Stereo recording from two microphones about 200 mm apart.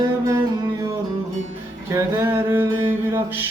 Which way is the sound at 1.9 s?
10° right (ahead or behind).